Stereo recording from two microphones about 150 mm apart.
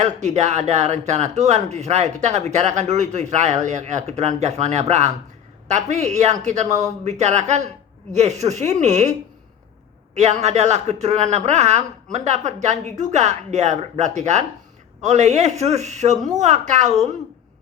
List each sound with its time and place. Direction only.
0.0 s speech: 50° right (ahead or behind)
10.2 s speech: 50° right (ahead or behind)